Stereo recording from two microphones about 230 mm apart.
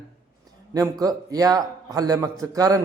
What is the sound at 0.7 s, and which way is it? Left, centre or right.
A man's voice, centre.